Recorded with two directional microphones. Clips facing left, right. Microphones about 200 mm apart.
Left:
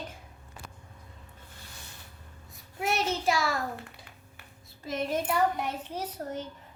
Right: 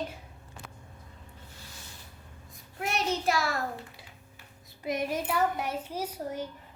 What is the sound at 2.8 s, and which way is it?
Child singing, centre (ahead or behind).